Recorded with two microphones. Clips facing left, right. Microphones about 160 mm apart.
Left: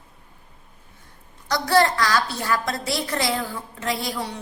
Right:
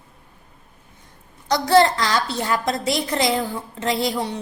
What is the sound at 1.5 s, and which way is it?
A woman's voice, 25° right (ahead or behind).